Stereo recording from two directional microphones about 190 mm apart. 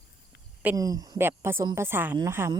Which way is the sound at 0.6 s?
15° right (ahead or behind).